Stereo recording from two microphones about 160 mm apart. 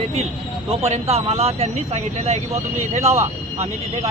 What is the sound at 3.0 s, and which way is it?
Speech, 15° right (ahead or behind).